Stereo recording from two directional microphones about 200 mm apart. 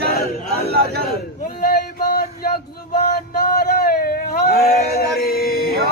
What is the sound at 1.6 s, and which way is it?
Music, 50° left (ahead or behind).